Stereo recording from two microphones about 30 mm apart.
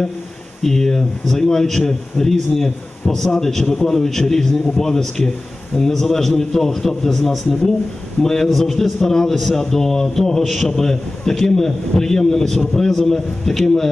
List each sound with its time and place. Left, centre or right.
0.6 s a man's voice: centre
8.5 s a man's voice: centre
9.1 s a man's voice: centre
10.4 s a man's voice: centre
10.8 s a man's voice: centre